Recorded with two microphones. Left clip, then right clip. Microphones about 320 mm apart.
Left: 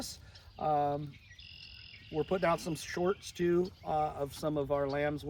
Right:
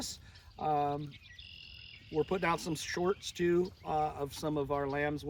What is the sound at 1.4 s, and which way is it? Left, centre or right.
Insect, right.